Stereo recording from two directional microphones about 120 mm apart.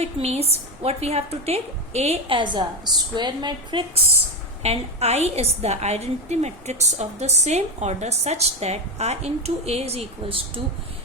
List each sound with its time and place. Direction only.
0.0 s a woman's voice: 60° right (ahead or behind)
2.4 s a woman's voice: 40° right (ahead or behind)
4.6 s a woman's voice: 60° right (ahead or behind)